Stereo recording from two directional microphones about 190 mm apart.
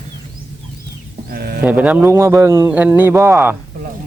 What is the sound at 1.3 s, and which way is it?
Speech, 55° right (ahead or behind).